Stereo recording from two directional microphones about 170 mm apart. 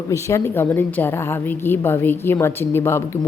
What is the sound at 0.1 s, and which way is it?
Speech, 15° left (ahead or behind).